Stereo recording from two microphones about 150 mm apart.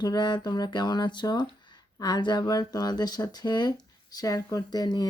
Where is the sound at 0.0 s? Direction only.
30° left (ahead or behind).